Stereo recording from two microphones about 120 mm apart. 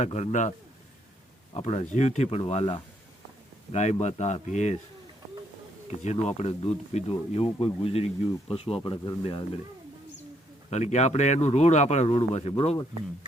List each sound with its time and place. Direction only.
0.0 s speech: 70° left (ahead or behind)
1.5 s speech: 60° left (ahead or behind)
2.4 s speech: 55° left (ahead or behind)
3.7 s speech: 75° left (ahead or behind)
6.0 s speech: 70° left (ahead or behind); by 9.4 s 45° left (ahead or behind)
10.7 s speech: 70° left (ahead or behind)
12.0 s speech: 50° left (ahead or behind)